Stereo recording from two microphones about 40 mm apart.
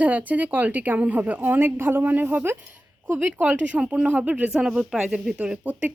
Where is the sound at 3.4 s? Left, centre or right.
Right.